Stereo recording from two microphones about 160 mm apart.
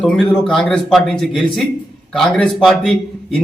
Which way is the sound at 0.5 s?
5° left (ahead or behind).